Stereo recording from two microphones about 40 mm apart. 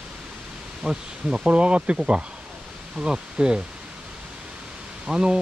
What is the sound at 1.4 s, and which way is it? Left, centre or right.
Speech, right.